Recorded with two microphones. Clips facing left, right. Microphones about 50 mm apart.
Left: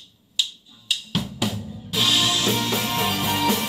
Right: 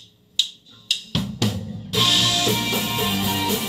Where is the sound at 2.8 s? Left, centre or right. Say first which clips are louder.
Even; left.